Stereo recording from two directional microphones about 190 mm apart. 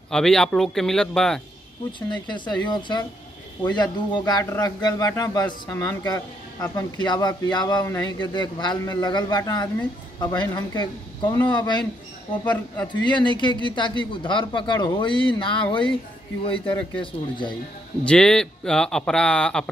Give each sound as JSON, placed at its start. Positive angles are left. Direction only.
{"t": 0.1, "sound": "speech", "side_deg": 5}
{"t": 2.2, "sound": "a man's voice", "side_deg": 25}
{"t": 13.0, "sound": "a man's voice", "side_deg": 25}
{"t": 18.0, "sound": "speech", "side_deg": 5}